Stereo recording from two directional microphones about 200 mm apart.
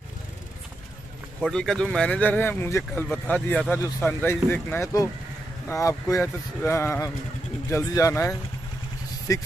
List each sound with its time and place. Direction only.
1.4 s speech: 5° left (ahead or behind)